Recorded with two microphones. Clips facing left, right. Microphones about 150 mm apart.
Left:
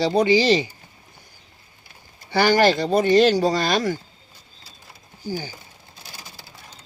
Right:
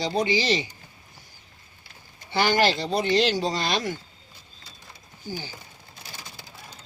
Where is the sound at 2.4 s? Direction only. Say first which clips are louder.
Left 5 dB; 45° left (ahead or behind).